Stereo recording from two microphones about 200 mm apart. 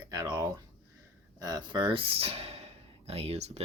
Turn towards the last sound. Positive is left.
turn(degrees=-30)  # may be behind; listen again after turning